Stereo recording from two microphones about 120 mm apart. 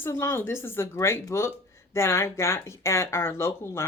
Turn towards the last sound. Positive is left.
turn(degrees=20)  # may be behind; listen again after turning